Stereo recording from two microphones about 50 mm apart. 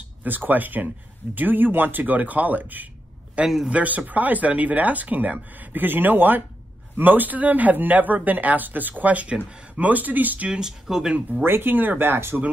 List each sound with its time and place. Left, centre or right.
0.2 s speech: right
3.4 s speech: centre
3.7 s speech: right
10.5 s speech: centre
11.1 s speech: right
11.4 s speech: right